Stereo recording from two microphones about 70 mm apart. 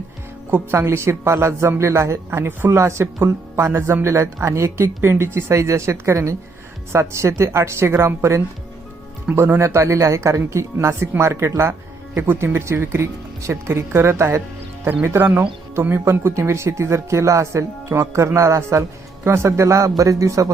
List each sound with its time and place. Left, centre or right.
0.5 s a man's voice: right